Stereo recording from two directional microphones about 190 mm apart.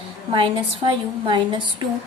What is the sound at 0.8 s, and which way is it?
Speech, 25° right (ahead or behind).